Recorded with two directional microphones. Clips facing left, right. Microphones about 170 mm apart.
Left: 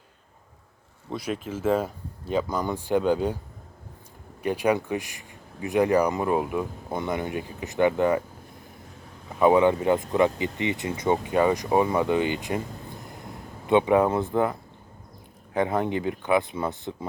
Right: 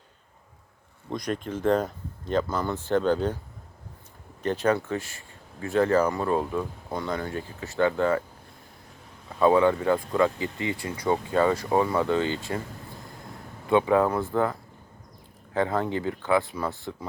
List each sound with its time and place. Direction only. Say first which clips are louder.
1.1 s speech: right 1 dB; 5° left (ahead or behind)
4.4 s speech: left 1 dB; 10° left (ahead or behind)
9.4 s speech: left 1 dB; 20° left (ahead or behind)